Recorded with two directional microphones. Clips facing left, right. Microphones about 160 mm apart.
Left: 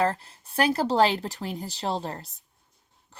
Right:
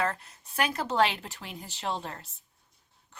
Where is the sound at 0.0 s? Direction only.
30° left (ahead or behind).